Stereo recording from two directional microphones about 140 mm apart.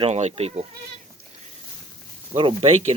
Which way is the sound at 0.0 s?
50° right (ahead or behind).